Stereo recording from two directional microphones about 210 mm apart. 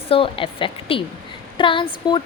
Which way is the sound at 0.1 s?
25° left (ahead or behind).